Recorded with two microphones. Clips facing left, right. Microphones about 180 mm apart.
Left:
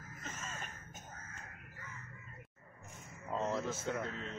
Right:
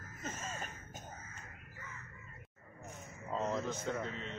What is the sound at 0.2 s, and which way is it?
Caw, 40° right (ahead or behind).